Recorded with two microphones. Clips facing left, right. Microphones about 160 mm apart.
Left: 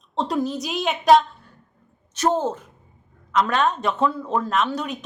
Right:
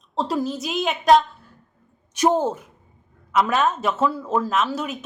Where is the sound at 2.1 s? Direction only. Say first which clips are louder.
Right 2 dB; 10° right (ahead or behind).